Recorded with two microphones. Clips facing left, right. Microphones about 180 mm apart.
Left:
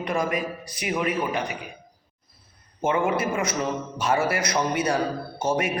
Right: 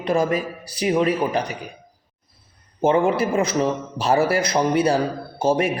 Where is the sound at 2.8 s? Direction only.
35° right (ahead or behind).